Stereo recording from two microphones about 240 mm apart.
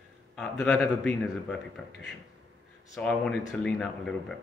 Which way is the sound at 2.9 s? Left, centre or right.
Centre.